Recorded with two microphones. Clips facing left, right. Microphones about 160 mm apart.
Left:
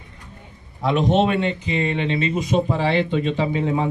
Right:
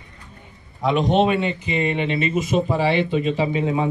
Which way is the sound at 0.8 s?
Centre (ahead or behind).